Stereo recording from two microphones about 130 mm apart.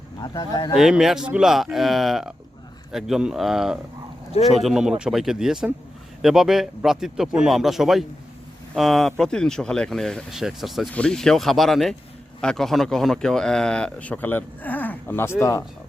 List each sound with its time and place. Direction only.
0.2 s speech: 30° left (ahead or behind)
0.7 s speech: 5° right (ahead or behind); by 15.6 s 20° left (ahead or behind)